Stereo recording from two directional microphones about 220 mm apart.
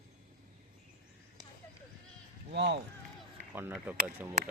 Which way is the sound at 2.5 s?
50° right (ahead or behind).